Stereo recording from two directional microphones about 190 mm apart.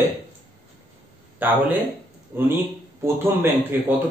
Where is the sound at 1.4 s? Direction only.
10° right (ahead or behind).